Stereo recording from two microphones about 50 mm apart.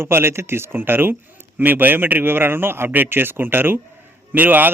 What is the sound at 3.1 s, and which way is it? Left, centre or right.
A man's voice, right.